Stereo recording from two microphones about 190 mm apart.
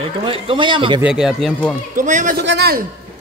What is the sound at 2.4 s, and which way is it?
Speech, 60° right (ahead or behind).